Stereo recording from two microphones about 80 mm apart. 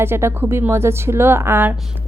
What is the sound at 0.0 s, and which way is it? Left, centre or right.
A woman's voice, right.